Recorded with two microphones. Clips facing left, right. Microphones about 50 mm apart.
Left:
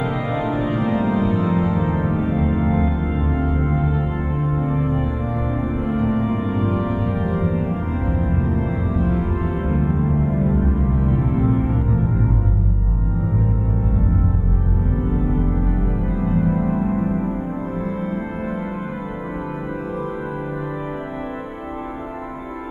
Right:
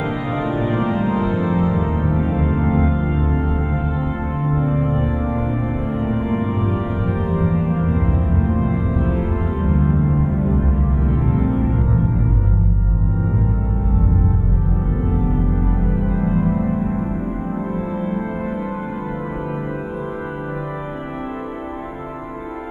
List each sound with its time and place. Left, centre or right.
0.5 s organ: right
1.0 s music: right
3.2 s music: centre
9.6 s music: centre
11.3 s music: centre
16.2 s music: centre